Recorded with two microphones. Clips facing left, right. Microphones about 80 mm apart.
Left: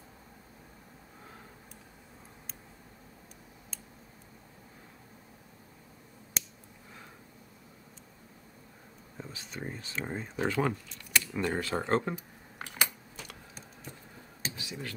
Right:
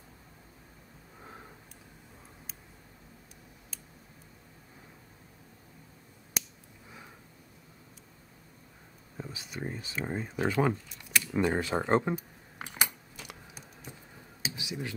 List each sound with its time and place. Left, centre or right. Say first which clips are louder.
9.1 s speech: right 2 dB; centre
11.9 s coin: right 3 dB; centre
14.4 s a sound: right 2 dB; centre